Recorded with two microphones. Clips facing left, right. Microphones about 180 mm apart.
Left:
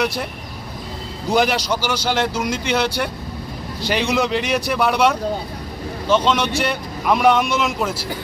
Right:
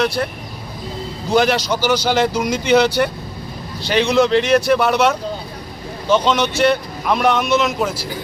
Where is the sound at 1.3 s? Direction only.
5° left (ahead or behind).